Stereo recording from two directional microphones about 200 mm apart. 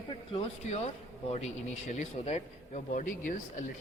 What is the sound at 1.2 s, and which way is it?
Speech, 35° left (ahead or behind).